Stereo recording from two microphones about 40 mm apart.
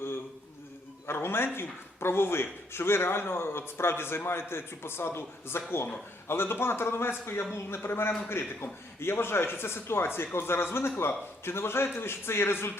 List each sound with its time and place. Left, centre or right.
1.0 s a man's voice: left
7.7 s a man's voice: left